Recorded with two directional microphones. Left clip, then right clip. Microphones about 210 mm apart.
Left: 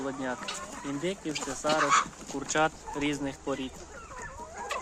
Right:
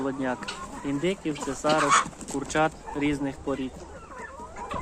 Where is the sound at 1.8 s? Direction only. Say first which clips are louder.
Right 3 dB; 55° right (ahead or behind).